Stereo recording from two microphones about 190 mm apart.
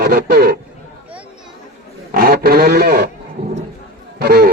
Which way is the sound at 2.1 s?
50° right (ahead or behind).